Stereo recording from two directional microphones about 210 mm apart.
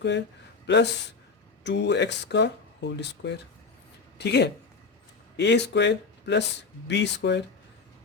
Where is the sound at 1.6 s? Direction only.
55° left (ahead or behind).